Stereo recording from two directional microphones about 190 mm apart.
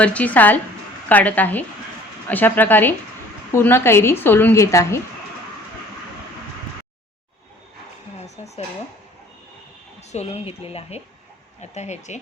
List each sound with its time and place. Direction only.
0.0 s a woman's voice: 5° left (ahead or behind)
8.2 s a sound: 35° left (ahead or behind)
10.1 s speech: 35° left (ahead or behind)